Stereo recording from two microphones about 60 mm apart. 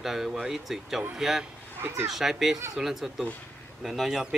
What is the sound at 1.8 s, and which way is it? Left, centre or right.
Speech, right.